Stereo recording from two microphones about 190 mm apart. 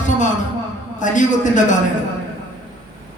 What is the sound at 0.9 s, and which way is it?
Speech, 40° left (ahead or behind).